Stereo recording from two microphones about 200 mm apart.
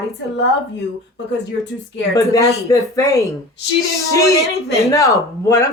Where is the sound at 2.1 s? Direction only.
15° left (ahead or behind).